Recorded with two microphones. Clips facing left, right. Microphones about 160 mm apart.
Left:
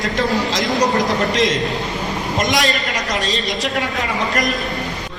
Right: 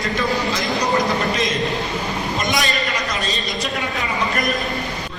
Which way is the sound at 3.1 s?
80° left.